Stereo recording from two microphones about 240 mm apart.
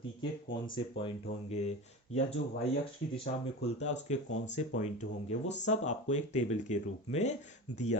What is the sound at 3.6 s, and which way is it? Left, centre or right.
Speech, left.